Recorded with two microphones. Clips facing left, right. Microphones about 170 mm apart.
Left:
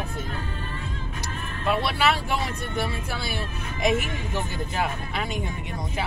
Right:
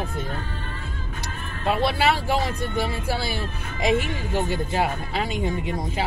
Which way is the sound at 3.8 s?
30° right (ahead or behind).